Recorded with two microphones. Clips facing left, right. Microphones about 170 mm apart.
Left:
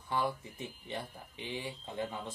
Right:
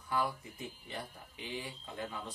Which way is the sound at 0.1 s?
25° left (ahead or behind).